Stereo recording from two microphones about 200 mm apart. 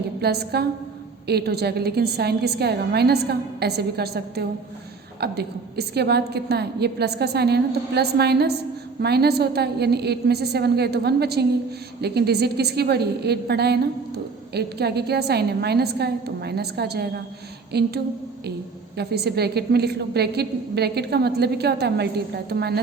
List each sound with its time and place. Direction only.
0.2 s a woman's voice: 55° right (ahead or behind)